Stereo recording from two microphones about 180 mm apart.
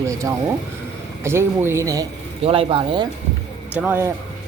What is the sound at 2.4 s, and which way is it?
Speech, 30° right (ahead or behind).